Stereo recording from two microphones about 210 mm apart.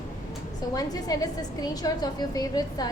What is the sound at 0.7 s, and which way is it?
A woman's voice, 15° left (ahead or behind).